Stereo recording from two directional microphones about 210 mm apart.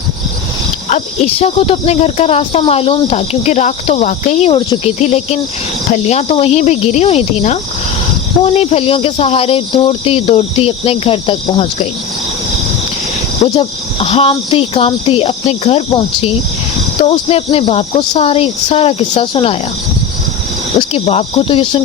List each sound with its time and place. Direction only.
0.9 s speech: 35° left (ahead or behind)
13.4 s speech: 25° left (ahead or behind)
20.7 s speech: 30° left (ahead or behind)